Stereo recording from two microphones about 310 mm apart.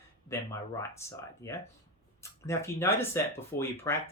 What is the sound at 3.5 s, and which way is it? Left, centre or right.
Speech, left.